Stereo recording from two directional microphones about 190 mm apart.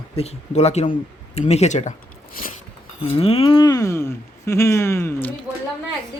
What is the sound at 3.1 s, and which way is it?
Speech, 30° left (ahead or behind).